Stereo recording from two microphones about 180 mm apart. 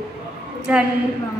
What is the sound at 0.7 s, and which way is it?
Speech, 5° right (ahead or behind).